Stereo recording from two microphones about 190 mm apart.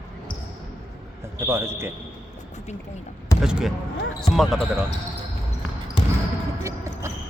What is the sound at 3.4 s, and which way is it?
Speech, 5° right (ahead or behind).